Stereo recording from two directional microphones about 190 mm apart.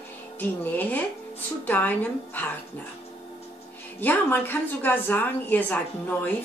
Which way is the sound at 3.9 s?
10° left (ahead or behind).